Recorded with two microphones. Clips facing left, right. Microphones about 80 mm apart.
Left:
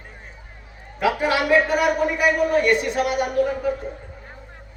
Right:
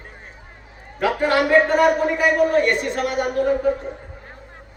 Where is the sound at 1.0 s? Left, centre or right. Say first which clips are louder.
Right 2 dB; centre.